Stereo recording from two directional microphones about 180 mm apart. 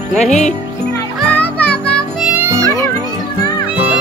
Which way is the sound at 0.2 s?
40° left (ahead or behind).